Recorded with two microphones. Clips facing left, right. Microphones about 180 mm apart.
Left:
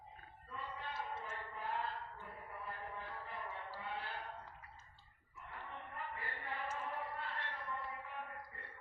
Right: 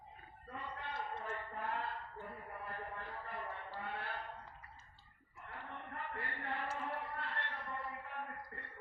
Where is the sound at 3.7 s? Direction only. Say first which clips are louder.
Right 2 dB; 60° right (ahead or behind).